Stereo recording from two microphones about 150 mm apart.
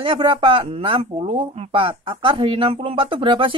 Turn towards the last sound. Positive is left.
turn(degrees=-35)  # may be behind; listen again after turning